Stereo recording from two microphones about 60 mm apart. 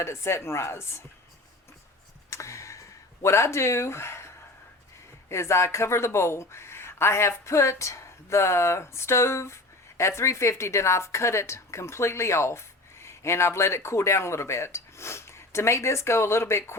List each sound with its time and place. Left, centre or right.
0.0 s a woman's voice: left
2.3 s a sound: left
5.3 s a woman's voice: left